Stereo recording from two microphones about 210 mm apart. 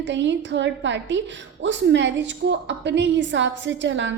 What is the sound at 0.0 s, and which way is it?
A woman's voice, 60° right (ahead or behind).